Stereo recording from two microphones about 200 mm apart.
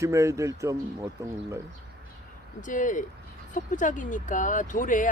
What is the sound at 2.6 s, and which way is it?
Speech, 40° left (ahead or behind).